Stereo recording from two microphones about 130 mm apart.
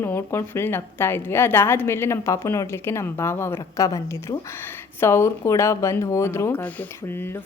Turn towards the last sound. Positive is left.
turn(degrees=20)  # may be behind; listen again after turning